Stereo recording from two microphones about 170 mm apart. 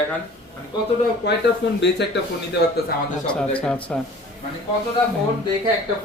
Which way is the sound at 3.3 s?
5° left (ahead or behind).